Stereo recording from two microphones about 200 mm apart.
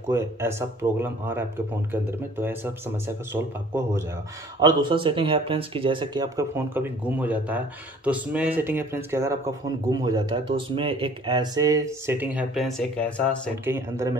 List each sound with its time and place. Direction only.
0.1 s speech: 15° right (ahead or behind); by 13.4 s 5° left (ahead or behind)
13.7 s speech: 15° right (ahead or behind)